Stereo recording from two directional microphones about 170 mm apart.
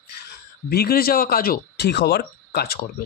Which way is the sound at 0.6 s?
65° left (ahead or behind).